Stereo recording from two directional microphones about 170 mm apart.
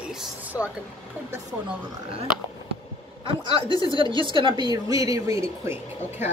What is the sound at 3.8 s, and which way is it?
A woman's voice, 30° right (ahead or behind).